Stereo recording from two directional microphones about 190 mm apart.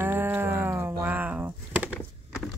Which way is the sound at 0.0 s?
10° right (ahead or behind).